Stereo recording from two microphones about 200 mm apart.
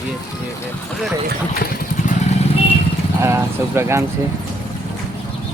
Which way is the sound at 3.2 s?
15° right (ahead or behind).